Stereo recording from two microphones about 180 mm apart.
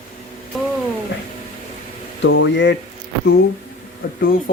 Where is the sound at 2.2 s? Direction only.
90° left.